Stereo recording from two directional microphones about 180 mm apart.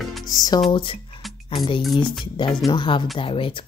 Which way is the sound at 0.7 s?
30° left (ahead or behind).